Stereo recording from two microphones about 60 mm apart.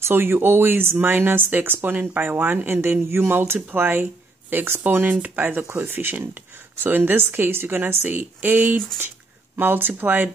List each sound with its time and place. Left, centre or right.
0.0 s speech: right